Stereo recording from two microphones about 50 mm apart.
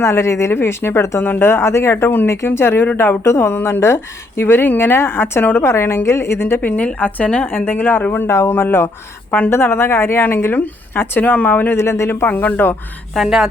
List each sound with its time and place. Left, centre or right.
0.0 s a woman's voice: left
3.2 s speech: left
3.5 s a woman's voice: left
5.6 s speech: left
6.6 s a woman's voice: left
7.4 s a woman's voice: left
11.8 s speech: left
12.0 s a woman's voice: left
13.1 s speech: centre